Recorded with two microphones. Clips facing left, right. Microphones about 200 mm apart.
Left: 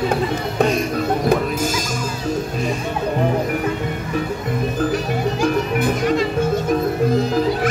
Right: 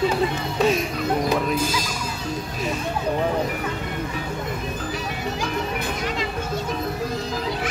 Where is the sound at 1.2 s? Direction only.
45° left (ahead or behind).